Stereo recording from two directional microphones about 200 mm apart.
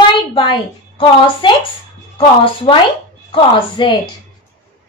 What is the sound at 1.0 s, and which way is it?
Speech, 25° left (ahead or behind).